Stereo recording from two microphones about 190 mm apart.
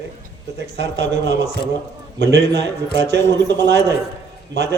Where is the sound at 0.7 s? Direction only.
65° right (ahead or behind).